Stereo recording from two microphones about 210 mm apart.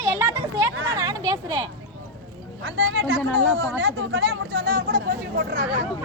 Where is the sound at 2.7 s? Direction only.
60° right (ahead or behind).